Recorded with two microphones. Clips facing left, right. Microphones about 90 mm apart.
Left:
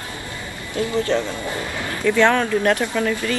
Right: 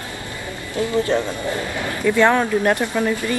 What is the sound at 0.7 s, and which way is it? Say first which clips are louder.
Speech: right 1 dB; 20° right (ahead or behind).